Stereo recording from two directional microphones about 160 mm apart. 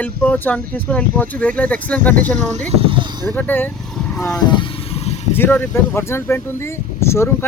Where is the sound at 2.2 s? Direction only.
50° right (ahead or behind); by 3.3 s 30° right (ahead or behind).